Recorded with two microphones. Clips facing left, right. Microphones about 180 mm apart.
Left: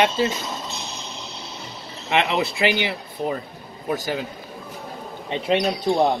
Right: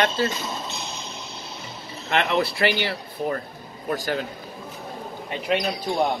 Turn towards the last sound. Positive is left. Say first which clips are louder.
# left 4 dB
turn(degrees=25)  # may be behind; listen again after turning